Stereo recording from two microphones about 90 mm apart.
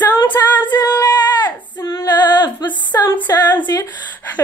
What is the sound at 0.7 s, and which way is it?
Female singing, 45° left (ahead or behind).